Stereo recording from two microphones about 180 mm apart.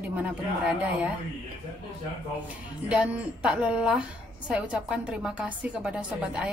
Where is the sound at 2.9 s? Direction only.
5° right (ahead or behind).